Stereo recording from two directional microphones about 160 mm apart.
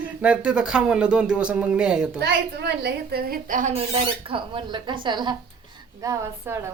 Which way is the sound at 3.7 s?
35° right (ahead or behind).